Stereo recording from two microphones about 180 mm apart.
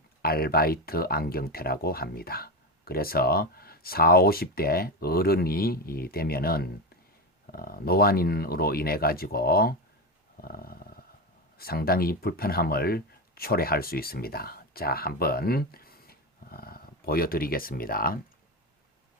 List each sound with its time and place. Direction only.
0.2 s speech: 55° left (ahead or behind)
10.4 s dog: 55° left (ahead or behind)
11.5 s speech: 55° left (ahead or behind)